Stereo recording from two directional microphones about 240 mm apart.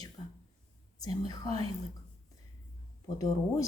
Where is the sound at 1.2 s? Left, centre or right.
Centre.